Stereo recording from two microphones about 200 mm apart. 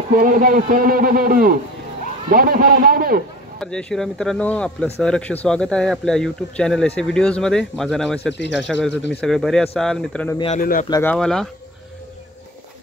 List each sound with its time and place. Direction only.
0.1 s a man's voice: 40° right (ahead or behind)
3.5 s speech: 5° left (ahead or behind)
8.3 s speech: 60° left (ahead or behind)
9.2 s speech: centre (ahead or behind)
10.5 s speech: 40° left (ahead or behind)
10.9 s speech: 10° left (ahead or behind)